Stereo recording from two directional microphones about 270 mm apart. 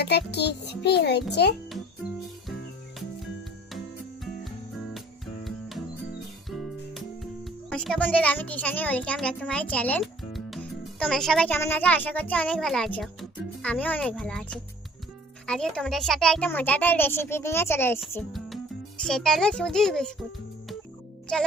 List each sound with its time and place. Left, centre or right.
0.0 s music: left
4.9 s music: centre
6.5 s a child's voice: centre
21.3 s a child's voice: centre